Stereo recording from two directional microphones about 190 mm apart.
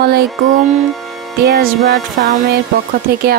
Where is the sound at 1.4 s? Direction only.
55° right (ahead or behind).